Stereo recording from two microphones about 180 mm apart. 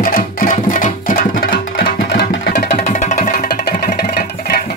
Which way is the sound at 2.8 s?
40° left (ahead or behind).